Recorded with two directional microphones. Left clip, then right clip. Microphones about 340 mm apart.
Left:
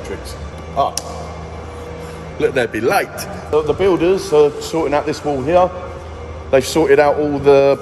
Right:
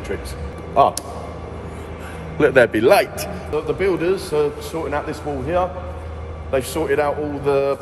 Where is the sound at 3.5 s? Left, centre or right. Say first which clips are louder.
Left 6 dB; centre.